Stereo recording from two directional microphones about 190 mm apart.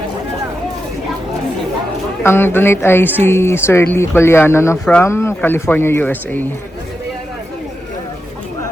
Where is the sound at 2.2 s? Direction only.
10° left (ahead or behind).